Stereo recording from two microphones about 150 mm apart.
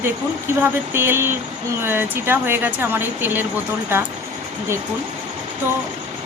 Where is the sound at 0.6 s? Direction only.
15° right (ahead or behind).